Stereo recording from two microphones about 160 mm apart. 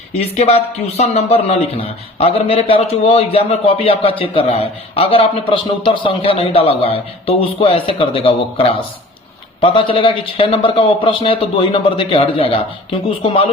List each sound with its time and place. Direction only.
0.2 s a man's voice: 40° left (ahead or behind)